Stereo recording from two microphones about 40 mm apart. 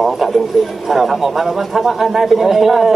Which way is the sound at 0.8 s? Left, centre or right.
Centre.